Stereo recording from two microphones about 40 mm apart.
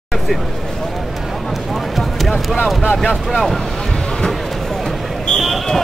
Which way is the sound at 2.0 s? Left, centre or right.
Centre.